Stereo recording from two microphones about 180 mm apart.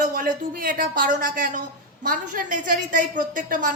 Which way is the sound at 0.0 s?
50° right (ahead or behind).